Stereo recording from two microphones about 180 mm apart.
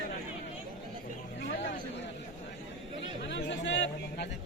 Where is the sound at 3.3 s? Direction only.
75° left (ahead or behind).